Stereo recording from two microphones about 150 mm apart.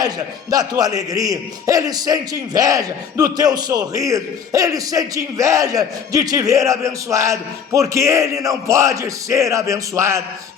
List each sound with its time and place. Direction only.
0.5 s a man's voice: 25° right (ahead or behind)